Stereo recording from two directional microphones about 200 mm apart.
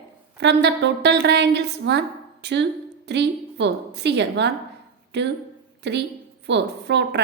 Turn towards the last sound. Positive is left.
turn(degrees=-60)  # may be behind; listen again after turning